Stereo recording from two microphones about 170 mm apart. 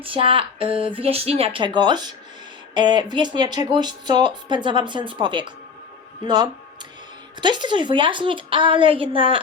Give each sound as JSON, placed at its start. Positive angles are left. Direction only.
{"t": 0.0, "sound": "speech", "side_deg": -30}